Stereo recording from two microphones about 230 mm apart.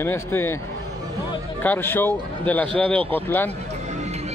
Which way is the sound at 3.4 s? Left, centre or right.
Right.